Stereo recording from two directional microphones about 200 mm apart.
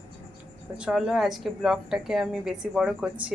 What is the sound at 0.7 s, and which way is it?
A woman's voice, 5° right (ahead or behind).